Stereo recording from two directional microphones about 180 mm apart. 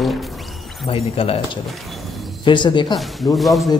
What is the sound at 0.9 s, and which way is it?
Speech, 30° left (ahead or behind).